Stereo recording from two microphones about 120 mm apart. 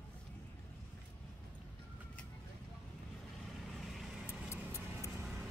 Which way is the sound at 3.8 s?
Centre (ahead or behind).